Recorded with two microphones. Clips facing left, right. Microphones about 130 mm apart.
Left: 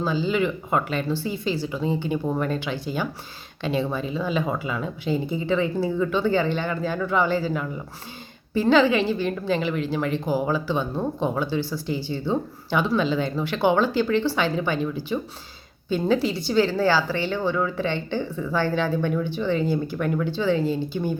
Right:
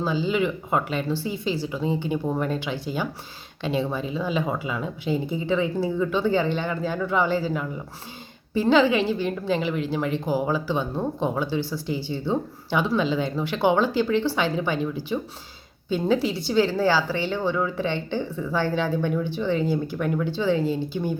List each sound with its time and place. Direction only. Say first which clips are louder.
0.0 s a woman's voice: even; 15° right (ahead or behind)